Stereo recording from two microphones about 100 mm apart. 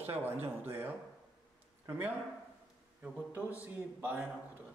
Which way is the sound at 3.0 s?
15° right (ahead or behind).